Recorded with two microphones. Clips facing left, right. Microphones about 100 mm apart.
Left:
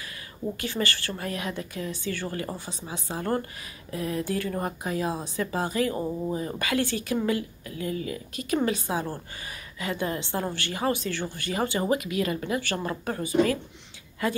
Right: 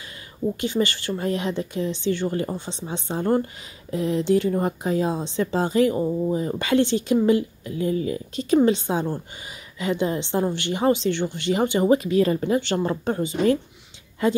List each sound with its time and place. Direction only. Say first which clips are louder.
0.6 s a woman's voice: right 5 dB; 20° right (ahead or behind)